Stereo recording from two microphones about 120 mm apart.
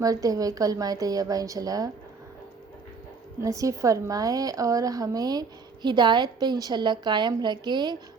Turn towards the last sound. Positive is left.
turn(degrees=-40)  # may be behind; listen again after turning